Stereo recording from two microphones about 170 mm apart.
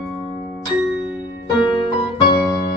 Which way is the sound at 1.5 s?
25° left (ahead or behind).